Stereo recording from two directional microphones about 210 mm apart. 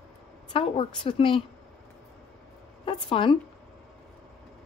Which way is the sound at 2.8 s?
25° left (ahead or behind).